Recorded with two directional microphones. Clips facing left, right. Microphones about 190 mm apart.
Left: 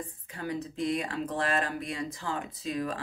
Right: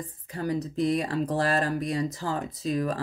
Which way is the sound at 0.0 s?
40° right (ahead or behind).